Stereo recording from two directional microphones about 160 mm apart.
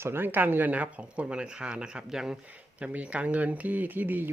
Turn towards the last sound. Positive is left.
turn(degrees=-10)  # may be behind; listen again after turning